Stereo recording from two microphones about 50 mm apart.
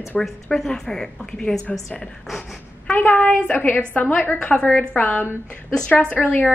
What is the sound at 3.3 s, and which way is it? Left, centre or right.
Speech, left.